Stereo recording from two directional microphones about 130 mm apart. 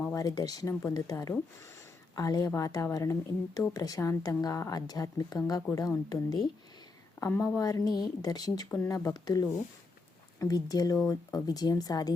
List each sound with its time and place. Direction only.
0.0 s a woman's voice: 25° left (ahead or behind)